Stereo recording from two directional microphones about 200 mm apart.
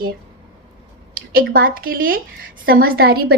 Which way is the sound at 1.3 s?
45° right (ahead or behind).